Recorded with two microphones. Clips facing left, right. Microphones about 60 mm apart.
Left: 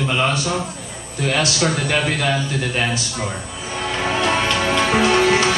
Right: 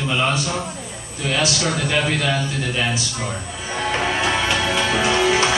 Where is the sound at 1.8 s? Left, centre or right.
Left.